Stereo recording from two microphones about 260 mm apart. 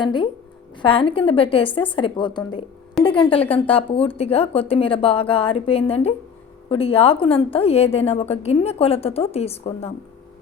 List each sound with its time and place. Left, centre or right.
0.0 s a woman's voice: centre